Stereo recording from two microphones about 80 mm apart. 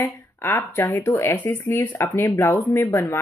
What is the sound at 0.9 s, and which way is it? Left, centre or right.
Speech, left.